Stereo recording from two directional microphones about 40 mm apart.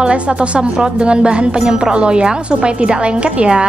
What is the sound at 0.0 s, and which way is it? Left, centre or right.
Speech, right.